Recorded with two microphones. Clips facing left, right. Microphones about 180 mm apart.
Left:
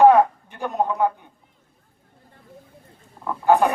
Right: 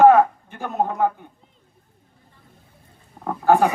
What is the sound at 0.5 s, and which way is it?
Speech, 55° right (ahead or behind).